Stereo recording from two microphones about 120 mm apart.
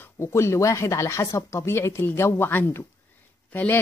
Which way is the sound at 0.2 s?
20° left (ahead or behind).